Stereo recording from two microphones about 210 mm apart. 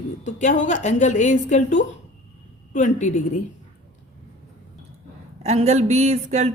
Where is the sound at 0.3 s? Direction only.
35° left (ahead or behind).